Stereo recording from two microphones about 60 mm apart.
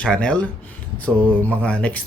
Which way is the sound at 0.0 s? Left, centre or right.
Centre.